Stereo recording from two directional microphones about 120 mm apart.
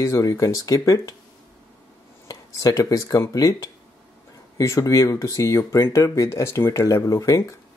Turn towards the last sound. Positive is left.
turn(degrees=25)  # may be behind; listen again after turning